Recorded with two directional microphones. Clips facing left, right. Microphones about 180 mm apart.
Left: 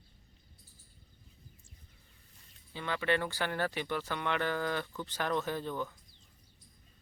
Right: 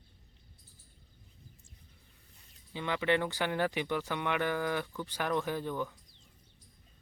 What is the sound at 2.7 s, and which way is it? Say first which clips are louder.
Speech: right 2 dB; 15° right (ahead or behind).